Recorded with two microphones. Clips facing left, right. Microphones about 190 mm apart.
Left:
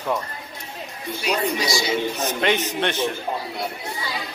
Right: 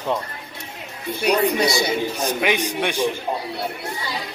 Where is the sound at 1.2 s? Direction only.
60° right (ahead or behind).